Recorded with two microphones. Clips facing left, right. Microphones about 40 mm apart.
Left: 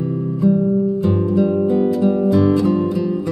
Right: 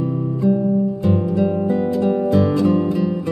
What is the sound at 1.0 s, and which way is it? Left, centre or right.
Music, centre.